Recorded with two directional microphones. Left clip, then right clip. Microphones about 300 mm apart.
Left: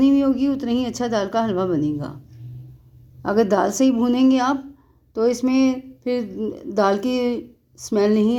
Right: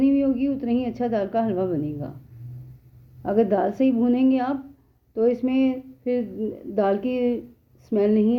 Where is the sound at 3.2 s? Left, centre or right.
Centre.